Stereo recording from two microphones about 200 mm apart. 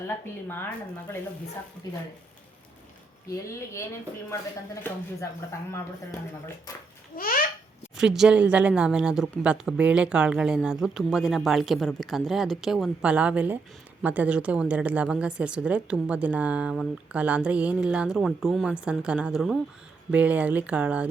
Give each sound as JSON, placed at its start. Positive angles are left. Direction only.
{"t": 0.4, "sound": "speech", "side_deg": 10}
{"t": 3.4, "sound": "speech", "side_deg": 15}
{"t": 7.2, "sound": "a child's voice", "side_deg": 45}
{"t": 7.9, "sound": "speech", "side_deg": 0}